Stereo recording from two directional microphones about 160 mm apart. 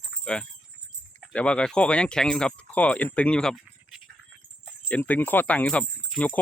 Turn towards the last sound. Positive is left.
turn(degrees=0)  # may be behind; listen again after turning